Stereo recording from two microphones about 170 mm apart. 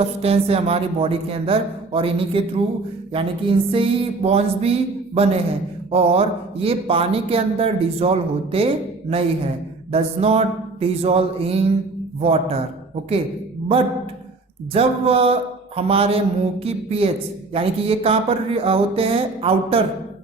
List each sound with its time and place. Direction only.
0.0 s speech: 35° right (ahead or behind)
14.7 s speech: 35° right (ahead or behind)